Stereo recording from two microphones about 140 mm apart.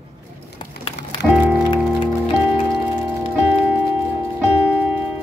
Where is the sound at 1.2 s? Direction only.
5° left (ahead or behind).